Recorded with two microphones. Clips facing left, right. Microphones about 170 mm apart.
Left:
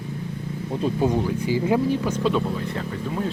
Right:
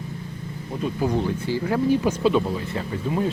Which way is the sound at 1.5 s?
15° left (ahead or behind).